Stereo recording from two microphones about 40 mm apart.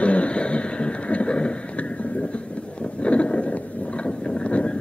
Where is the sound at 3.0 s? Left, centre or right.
Left.